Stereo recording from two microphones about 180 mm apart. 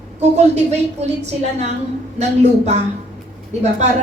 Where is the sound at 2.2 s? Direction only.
35° right (ahead or behind).